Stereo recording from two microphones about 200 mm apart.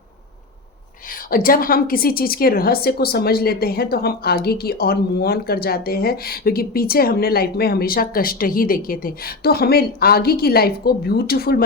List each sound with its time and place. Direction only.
1.3 s a woman's voice: 45° left (ahead or behind)